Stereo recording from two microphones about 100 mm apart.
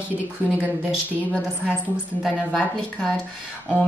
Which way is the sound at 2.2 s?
5° left (ahead or behind).